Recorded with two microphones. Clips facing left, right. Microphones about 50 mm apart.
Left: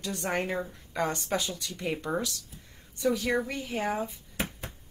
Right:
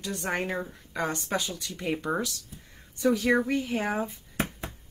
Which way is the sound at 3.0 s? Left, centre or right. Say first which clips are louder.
Right 4 dB; right.